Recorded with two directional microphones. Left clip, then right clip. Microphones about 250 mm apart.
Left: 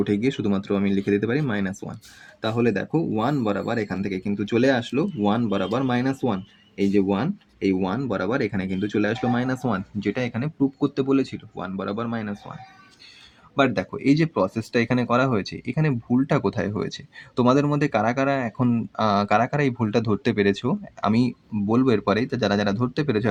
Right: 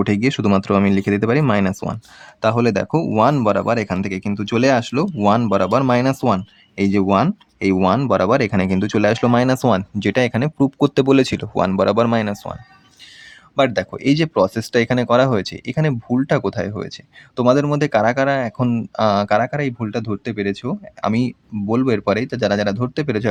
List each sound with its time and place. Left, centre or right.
0.0 s speech: right
13.6 s speech: centre
21.0 s speech: centre